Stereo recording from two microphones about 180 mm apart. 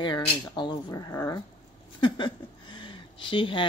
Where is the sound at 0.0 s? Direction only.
25° left (ahead or behind).